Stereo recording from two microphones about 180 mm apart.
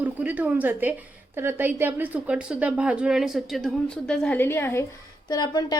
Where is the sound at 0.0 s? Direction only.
10° right (ahead or behind).